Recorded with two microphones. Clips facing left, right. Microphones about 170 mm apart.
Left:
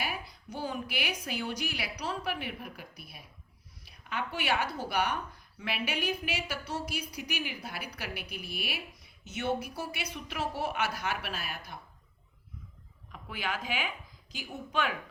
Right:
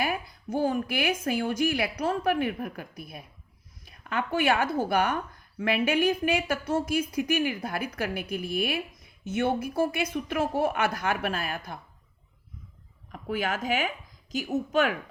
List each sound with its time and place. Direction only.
0.0 s a woman's voice: 50° right (ahead or behind)
13.1 s a woman's voice: 45° right (ahead or behind)